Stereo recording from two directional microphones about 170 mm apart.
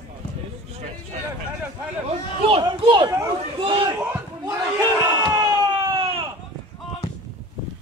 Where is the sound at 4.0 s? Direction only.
15° right (ahead or behind).